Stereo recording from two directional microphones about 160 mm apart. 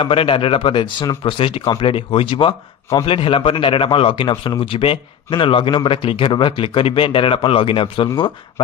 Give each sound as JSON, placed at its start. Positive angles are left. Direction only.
{"t": 0.0, "sound": "a man's voice", "side_deg": 35}